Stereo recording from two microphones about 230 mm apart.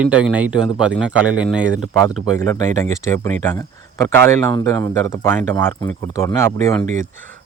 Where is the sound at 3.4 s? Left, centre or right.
Centre.